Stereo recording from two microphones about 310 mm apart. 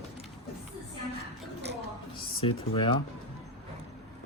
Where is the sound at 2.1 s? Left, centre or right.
Centre.